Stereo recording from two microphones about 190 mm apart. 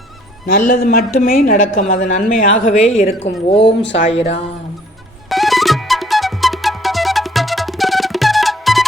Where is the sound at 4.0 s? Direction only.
35° left (ahead or behind).